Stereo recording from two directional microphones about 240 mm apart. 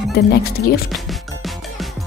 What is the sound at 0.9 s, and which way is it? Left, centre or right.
Music, centre.